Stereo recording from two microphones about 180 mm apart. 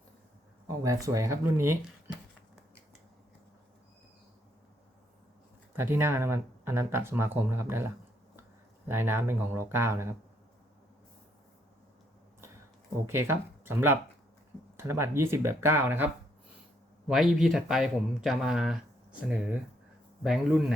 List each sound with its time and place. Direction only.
0.8 s speech: 20° right (ahead or behind)
5.7 s speech: 10° right (ahead or behind)
8.9 s speech: 10° right (ahead or behind)
13.1 s speech: 15° right (ahead or behind)
17.1 s speech: centre (ahead or behind)
20.2 s speech: 5° right (ahead or behind)